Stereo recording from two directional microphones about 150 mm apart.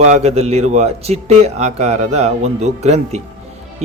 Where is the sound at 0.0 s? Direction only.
50° right (ahead or behind).